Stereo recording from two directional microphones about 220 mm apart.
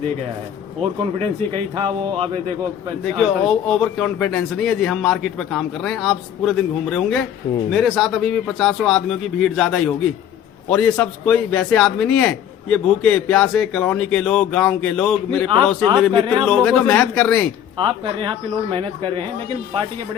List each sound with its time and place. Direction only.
0.8 s speech: 25° right (ahead or behind)
3.2 s a man's voice: centre (ahead or behind)
17.7 s speech: 20° right (ahead or behind)